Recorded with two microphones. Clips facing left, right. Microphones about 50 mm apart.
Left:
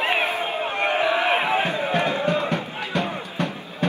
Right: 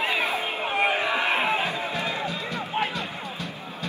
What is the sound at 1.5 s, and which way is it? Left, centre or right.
Music, left.